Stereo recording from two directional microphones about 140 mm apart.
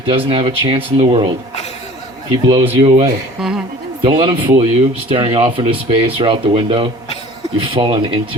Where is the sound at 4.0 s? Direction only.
35° right (ahead or behind).